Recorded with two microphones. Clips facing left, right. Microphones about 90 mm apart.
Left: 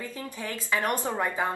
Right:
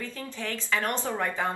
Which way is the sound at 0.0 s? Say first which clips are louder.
Even; 20° left (ahead or behind).